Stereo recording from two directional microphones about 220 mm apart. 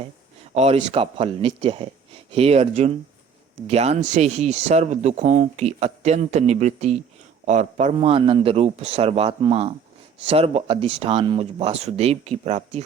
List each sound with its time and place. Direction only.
0.5 s speech: 30° right (ahead or behind)